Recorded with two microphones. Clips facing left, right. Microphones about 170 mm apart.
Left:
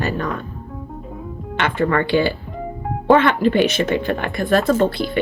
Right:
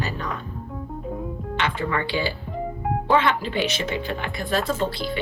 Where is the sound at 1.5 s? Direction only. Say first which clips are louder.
Left 7 dB; 55° left (ahead or behind).